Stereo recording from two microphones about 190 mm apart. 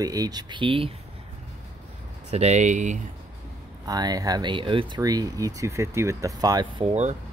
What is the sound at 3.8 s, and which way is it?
Speech, 20° right (ahead or behind).